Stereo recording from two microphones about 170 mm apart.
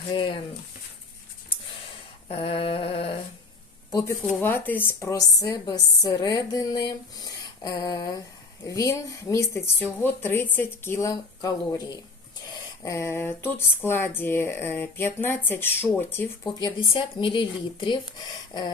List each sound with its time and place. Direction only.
0.1 s a woman's voice: 30° left (ahead or behind)
2.3 s a sound: 35° left (ahead or behind)
4.4 s a woman's voice: 10° left (ahead or behind)
16.6 s a woman's voice: 25° left (ahead or behind)